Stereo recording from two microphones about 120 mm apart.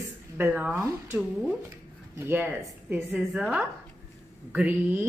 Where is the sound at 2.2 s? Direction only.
15° right (ahead or behind).